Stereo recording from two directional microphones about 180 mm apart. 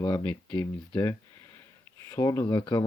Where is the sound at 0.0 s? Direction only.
10° left (ahead or behind).